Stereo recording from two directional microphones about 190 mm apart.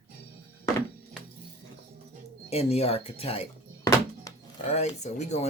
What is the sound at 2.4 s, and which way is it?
Speech, 30° left (ahead or behind).